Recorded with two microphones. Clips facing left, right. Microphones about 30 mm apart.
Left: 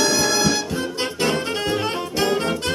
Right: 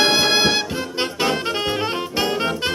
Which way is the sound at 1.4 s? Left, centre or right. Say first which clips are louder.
Right 1 dB; right.